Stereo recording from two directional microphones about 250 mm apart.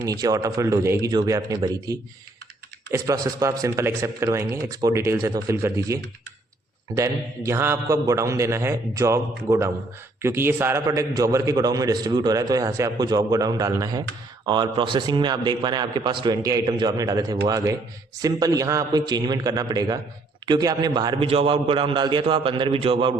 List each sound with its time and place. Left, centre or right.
0.0 s a man's voice: centre